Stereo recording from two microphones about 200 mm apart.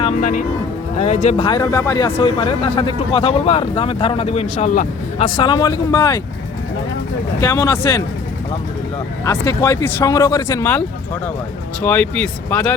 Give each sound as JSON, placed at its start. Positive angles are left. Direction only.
{"t": 0.0, "sound": "speech", "side_deg": 40}
{"t": 1.5, "sound": "speech", "side_deg": 20}
{"t": 2.1, "sound": "speech", "side_deg": 25}
{"t": 5.2, "sound": "speech", "side_deg": 25}
{"t": 7.4, "sound": "speech", "side_deg": 15}
{"t": 9.2, "sound": "speech", "side_deg": 20}